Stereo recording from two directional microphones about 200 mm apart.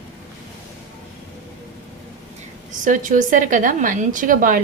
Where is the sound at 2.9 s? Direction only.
40° right (ahead or behind).